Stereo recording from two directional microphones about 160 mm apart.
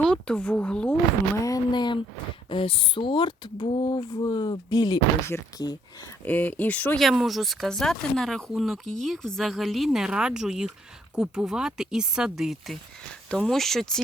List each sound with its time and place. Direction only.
0.0 s speech: 5° left (ahead or behind)
1.5 s speech: 25° left (ahead or behind)
6.2 s speech: 10° left (ahead or behind)